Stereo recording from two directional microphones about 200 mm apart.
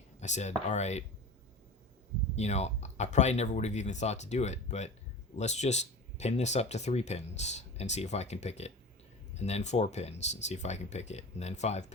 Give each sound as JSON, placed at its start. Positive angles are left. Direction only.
{"t": 0.2, "sound": "speech", "side_deg": 35}
{"t": 2.3, "sound": "speech", "side_deg": 35}